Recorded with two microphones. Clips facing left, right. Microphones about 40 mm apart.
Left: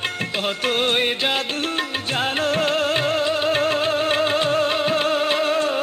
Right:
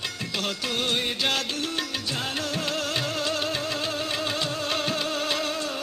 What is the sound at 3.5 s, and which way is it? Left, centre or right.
Music, left.